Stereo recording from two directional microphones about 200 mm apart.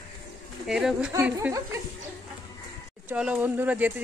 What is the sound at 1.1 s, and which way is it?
Speech, 10° right (ahead or behind).